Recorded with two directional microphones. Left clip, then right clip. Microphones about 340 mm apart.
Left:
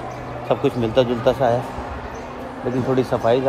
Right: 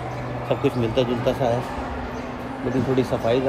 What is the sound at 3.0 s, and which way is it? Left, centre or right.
Speech, centre.